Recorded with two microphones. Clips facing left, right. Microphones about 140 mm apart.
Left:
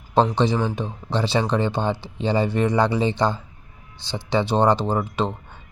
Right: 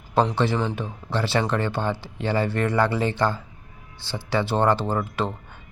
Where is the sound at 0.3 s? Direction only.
15° left (ahead or behind).